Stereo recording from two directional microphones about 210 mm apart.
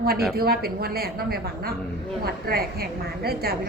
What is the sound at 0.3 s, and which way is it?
A woman's voice, 45° right (ahead or behind).